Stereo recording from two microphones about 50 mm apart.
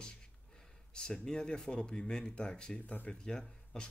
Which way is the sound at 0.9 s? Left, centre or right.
Centre.